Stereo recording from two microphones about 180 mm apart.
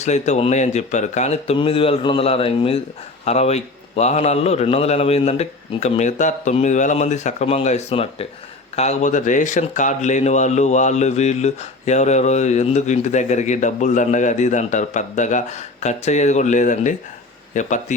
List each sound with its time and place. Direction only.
0.0 s speech: 40° left (ahead or behind)